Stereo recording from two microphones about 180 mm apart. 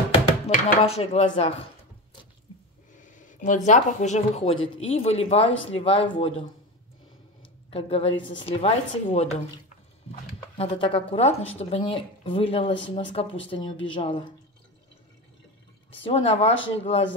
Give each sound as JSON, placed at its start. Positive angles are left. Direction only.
{"t": 0.5, "sound": "speech", "side_deg": 35}
{"t": 2.9, "sound": "speech", "side_deg": 45}
{"t": 7.7, "sound": "speech", "side_deg": 35}
{"t": 10.6, "sound": "a woman's voice", "side_deg": 30}
{"t": 15.9, "sound": "speech", "side_deg": 30}